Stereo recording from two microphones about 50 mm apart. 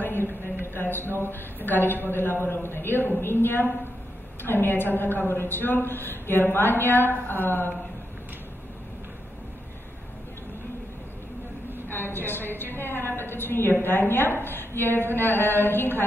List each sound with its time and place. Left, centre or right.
0.0 s a sound: left
1.3 s a woman's voice: left
11.9 s a woman's voice: left